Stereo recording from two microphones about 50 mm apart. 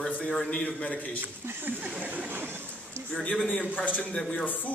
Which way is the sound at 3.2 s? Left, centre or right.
Left.